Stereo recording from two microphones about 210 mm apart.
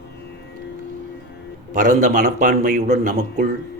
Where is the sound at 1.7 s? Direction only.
40° right (ahead or behind).